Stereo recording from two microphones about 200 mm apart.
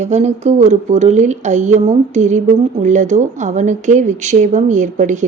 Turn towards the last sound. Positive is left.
turn(degrees=-40)  # may be behind; listen again after turning